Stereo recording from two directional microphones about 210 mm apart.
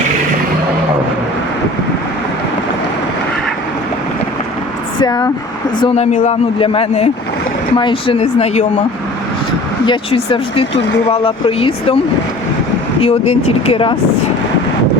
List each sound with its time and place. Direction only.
4.9 s speech: 20° left (ahead or behind)
5.8 s a man's voice: 30° left (ahead or behind)
9.8 s a man's voice: 25° left (ahead or behind)
13.0 s a man's voice: 30° left (ahead or behind)